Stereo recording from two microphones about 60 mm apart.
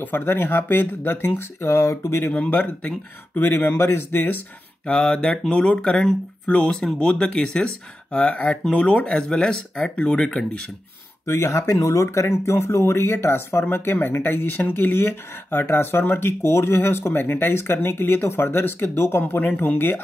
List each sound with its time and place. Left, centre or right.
0.0 s speech: left
2.2 s speech: left
4.8 s speech: left
11.2 s speech: left
12.4 s speech: left
19.2 s speech: left